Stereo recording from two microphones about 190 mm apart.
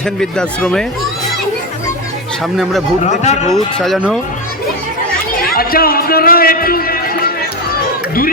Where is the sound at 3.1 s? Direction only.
40° left (ahead or behind).